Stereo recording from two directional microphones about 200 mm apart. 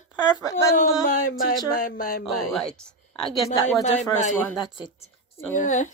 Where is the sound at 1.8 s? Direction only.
45° left (ahead or behind).